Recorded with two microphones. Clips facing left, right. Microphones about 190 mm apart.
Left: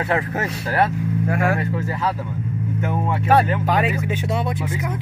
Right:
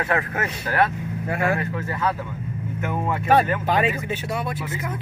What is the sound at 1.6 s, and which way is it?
Speech, 30° left (ahead or behind).